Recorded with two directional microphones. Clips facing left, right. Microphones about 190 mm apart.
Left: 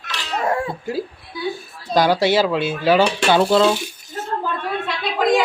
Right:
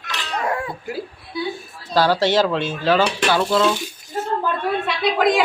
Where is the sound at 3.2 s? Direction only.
25° left (ahead or behind).